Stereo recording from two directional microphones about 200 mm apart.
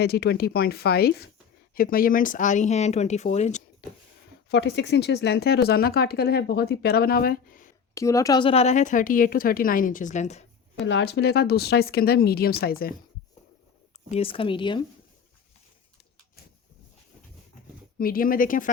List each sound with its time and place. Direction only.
0.0 s speech: 55° left (ahead or behind); by 3.6 s 35° left (ahead or behind)
4.4 s speech: 60° left (ahead or behind)
7.9 s speech: 15° left (ahead or behind); by 10.4 s 35° left (ahead or behind)
10.8 s speech: 60° left (ahead or behind)
14.1 s speech: 30° left (ahead or behind)
17.9 s speech: 45° left (ahead or behind)